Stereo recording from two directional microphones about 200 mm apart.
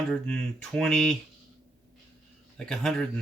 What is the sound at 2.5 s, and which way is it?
Speech, 5° left (ahead or behind).